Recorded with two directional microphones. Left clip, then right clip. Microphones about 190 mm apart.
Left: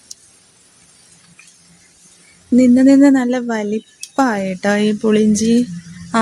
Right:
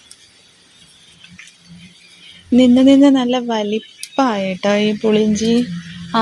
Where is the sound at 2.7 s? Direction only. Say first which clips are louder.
Left 1 dB; 15° left (ahead or behind).